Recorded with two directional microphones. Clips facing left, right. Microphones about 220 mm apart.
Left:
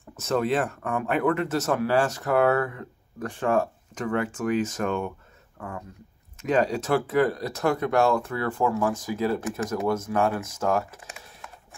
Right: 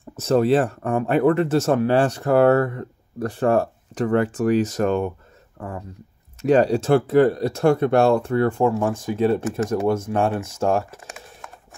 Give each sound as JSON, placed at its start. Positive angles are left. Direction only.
{"t": 0.2, "sound": "speech", "side_deg": -35}
{"t": 6.4, "sound": "speech", "side_deg": -35}
{"t": 11.0, "sound": "typing", "side_deg": -45}